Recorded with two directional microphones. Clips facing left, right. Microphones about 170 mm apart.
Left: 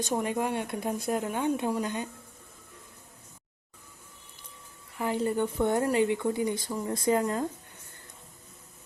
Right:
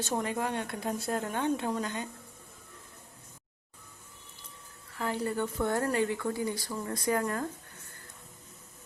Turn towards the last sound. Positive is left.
turn(degrees=20)  # may be behind; listen again after turning